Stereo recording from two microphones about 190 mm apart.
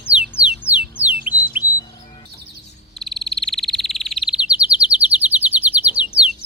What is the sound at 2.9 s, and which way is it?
Frog, centre (ahead or behind).